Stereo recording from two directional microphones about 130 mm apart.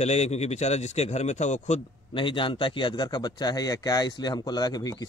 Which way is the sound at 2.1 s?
40° left (ahead or behind).